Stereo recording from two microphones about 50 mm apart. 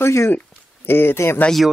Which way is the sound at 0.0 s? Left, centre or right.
Left.